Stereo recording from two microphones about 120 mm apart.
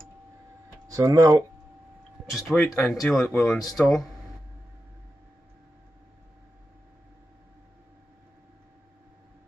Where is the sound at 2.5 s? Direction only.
20° left (ahead or behind).